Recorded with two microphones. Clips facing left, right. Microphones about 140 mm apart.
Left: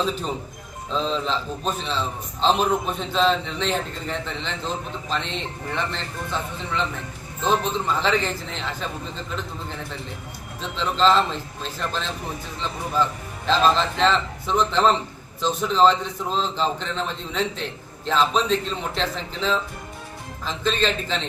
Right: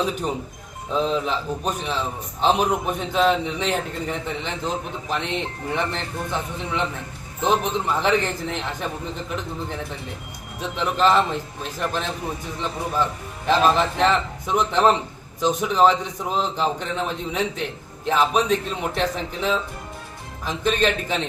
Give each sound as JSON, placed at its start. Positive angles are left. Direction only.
{"t": 0.9, "sound": "a man's voice", "side_deg": -15}
{"t": 10.6, "sound": "a man's voice", "side_deg": -15}
{"t": 13.5, "sound": "a man's voice", "side_deg": -15}